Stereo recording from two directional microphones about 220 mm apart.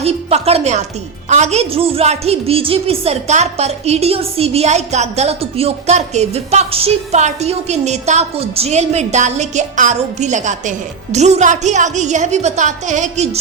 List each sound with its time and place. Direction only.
0.0 s a woman's voice: 30° right (ahead or behind)